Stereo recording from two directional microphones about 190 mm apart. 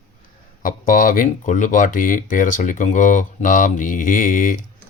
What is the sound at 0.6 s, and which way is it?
Speech, 45° left (ahead or behind).